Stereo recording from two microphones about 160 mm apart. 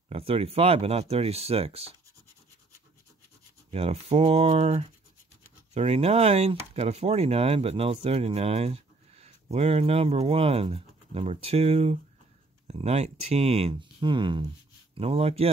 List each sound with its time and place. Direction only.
0.1 s speech: 35° right (ahead or behind)
3.7 s speech: 40° right (ahead or behind)